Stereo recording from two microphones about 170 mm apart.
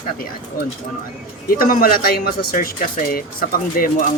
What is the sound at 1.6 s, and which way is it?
Speech, 60° left (ahead or behind).